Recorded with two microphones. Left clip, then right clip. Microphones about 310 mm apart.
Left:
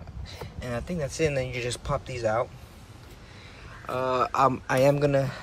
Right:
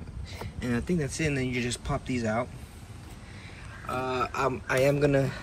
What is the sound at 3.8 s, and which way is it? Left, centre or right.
Speech, centre.